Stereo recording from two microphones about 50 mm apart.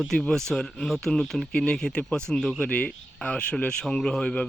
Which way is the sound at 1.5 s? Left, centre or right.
Centre.